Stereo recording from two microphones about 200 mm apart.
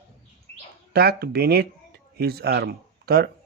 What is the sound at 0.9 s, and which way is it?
Speech, 55° right (ahead or behind).